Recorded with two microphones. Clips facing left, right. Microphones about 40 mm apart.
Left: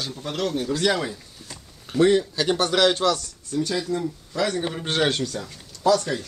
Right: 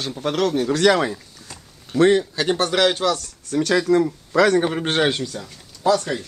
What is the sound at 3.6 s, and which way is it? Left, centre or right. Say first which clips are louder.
Speech: right 11 dB; right.